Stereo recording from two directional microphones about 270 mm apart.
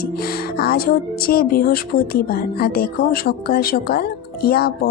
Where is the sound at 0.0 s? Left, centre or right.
Left.